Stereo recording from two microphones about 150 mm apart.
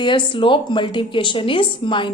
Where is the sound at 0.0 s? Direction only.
35° left (ahead or behind).